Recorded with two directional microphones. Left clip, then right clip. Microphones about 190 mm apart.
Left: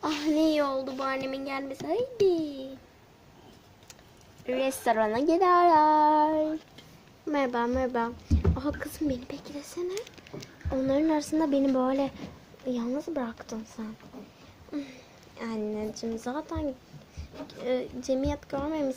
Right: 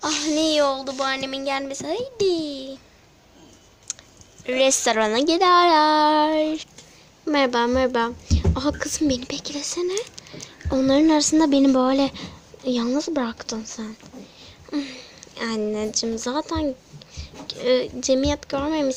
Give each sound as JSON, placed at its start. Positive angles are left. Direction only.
{"t": 0.0, "sound": "a child's voice", "side_deg": 0}
{"t": 3.9, "sound": "a sound", "side_deg": 0}
{"t": 4.4, "sound": "a woman's voice", "side_deg": 0}
{"t": 10.7, "sound": "a woman's voice", "side_deg": -15}